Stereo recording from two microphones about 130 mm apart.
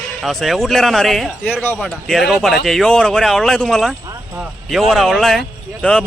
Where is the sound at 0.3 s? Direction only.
Centre (ahead or behind).